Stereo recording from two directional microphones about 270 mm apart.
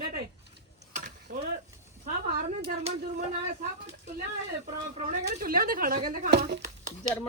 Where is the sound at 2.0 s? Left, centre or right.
Right.